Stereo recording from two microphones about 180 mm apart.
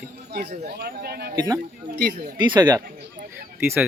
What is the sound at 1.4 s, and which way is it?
Speech, 20° right (ahead or behind).